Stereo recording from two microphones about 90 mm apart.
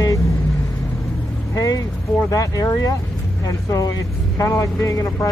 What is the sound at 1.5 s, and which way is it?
Vehicle, 40° left (ahead or behind).